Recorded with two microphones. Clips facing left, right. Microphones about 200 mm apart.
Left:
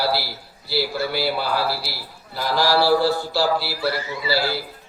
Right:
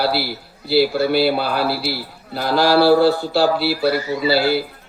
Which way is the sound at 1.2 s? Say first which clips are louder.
Right 5 dB; 60° right (ahead or behind).